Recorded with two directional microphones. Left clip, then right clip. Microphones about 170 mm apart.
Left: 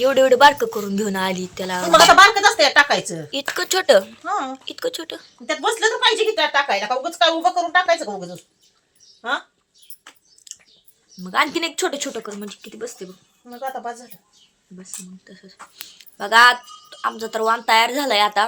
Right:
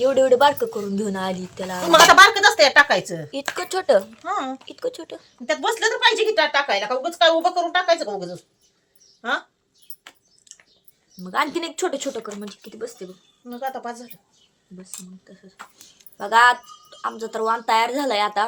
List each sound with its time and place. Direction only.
0.0 s a woman's voice: 10° left (ahead or behind)
1.8 s speech: 30° right (ahead or behind)
2.6 s a woman's voice: 10° right (ahead or behind)
4.3 s speech: 5° right (ahead or behind)
4.6 s a woman's voice: 5° left (ahead or behind)
6.9 s speech: 20° right (ahead or behind)
10.5 s a sound: 5° left (ahead or behind)
11.2 s a woman's voice: 15° left (ahead or behind)
13.4 s speech: 25° right (ahead or behind)
15.3 s a woman's voice: 15° left (ahead or behind)